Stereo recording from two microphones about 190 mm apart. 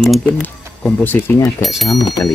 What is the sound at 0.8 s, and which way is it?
Speech, 10° left (ahead or behind).